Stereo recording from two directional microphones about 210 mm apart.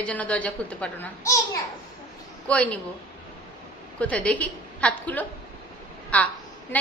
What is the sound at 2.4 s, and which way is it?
Speech, 5° left (ahead or behind).